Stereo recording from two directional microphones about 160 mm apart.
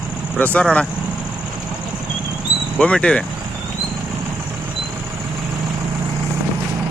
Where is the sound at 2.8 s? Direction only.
5° left (ahead or behind).